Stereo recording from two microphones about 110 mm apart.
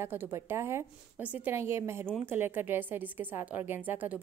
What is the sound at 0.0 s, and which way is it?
A woman's voice, 20° right (ahead or behind).